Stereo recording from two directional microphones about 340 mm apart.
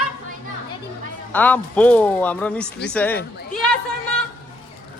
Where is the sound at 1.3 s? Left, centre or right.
Centre.